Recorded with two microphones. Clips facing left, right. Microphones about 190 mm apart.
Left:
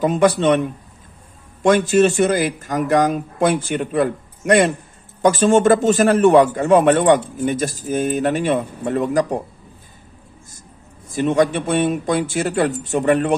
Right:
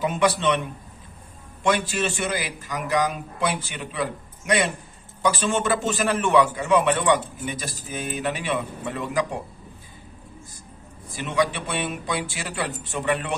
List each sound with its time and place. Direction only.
0.0 s a man's voice: 45° left (ahead or behind)
1.6 s a man's voice: 45° left (ahead or behind)
11.1 s a man's voice: 45° left (ahead or behind)